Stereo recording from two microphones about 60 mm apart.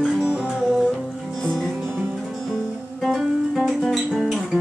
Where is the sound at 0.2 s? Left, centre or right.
Centre.